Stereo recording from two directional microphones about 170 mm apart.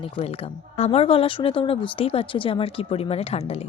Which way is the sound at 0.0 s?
30° left (ahead or behind).